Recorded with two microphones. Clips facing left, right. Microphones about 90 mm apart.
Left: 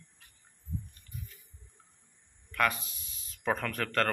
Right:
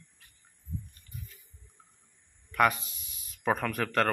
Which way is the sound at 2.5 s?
15° right (ahead or behind).